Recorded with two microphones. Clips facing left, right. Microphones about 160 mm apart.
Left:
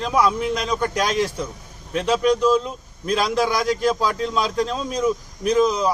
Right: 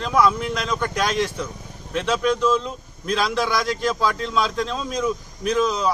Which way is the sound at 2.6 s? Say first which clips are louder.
Left 1 dB; 5° left (ahead or behind).